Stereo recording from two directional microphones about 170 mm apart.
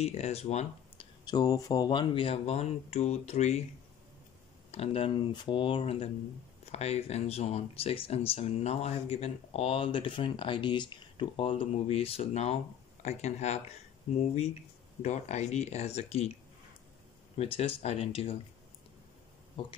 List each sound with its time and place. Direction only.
0.0 s speech: 40° left (ahead or behind)
1.2 s speech: 25° left (ahead or behind); by 3.6 s 40° left (ahead or behind)
4.6 s speech: 35° left (ahead or behind)
15.0 s speech: 40° left (ahead or behind)
17.4 s speech: 35° left (ahead or behind)
19.6 s speech: 30° left (ahead or behind)